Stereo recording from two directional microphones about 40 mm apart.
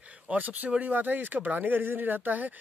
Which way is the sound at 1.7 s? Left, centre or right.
Right.